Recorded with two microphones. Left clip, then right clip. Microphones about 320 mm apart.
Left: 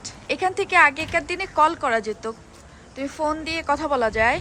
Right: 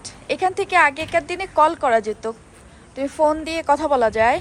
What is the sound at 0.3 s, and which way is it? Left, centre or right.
A woman's voice, centre.